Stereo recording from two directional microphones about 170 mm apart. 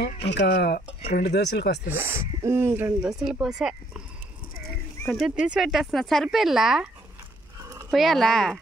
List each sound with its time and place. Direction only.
0.3 s speech: 85° left
1.9 s speech: 15° right (ahead or behind)
5.0 s speech: centre (ahead or behind)
7.6 s a sound: 20° right (ahead or behind)
7.9 s speech: centre (ahead or behind)